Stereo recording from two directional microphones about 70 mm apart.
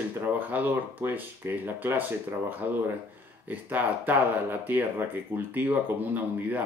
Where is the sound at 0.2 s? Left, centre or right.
Right.